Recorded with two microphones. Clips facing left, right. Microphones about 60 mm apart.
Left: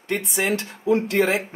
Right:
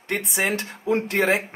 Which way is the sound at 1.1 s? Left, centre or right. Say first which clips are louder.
Right 2 dB; right.